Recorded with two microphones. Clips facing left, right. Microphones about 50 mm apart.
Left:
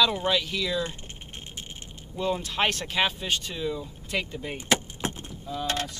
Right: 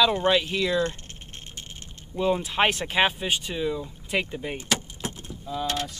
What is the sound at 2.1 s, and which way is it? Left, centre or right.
Speech, centre.